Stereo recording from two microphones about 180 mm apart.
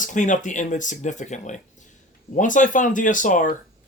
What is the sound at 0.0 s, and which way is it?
Speech, 45° left (ahead or behind).